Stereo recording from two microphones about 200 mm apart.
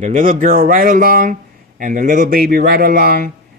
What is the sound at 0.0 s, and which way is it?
Speech, 40° right (ahead or behind).